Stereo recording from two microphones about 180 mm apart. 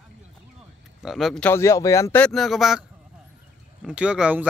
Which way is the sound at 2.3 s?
Centre (ahead or behind).